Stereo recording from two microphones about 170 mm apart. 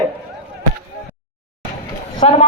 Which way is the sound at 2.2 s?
40° left (ahead or behind).